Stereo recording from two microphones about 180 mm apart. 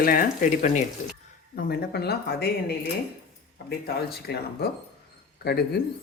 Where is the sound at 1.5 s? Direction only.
60° left (ahead or behind).